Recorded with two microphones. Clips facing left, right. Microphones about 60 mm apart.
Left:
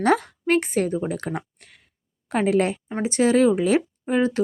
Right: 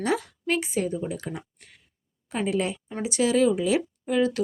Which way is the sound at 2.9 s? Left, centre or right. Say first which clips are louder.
Left 3 dB; left.